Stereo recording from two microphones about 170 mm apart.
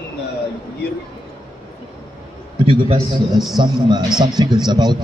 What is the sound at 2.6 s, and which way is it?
Speech, 30° right (ahead or behind).